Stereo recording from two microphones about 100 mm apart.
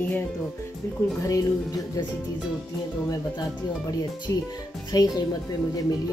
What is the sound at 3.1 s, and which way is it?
Speech, 40° left (ahead or behind).